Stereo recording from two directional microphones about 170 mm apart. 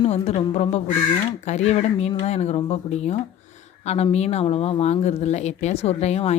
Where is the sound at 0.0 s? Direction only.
40° left (ahead or behind).